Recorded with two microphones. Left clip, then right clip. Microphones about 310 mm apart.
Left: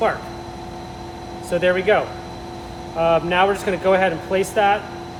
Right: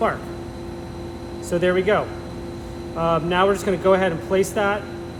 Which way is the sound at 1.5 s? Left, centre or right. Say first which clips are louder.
Left 2 dB; centre.